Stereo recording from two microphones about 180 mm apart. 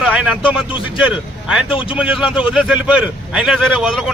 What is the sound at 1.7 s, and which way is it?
Speech, 30° left (ahead or behind).